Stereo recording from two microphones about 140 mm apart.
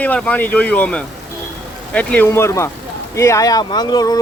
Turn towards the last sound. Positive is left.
turn(degrees=25)  # may be behind; listen again after turning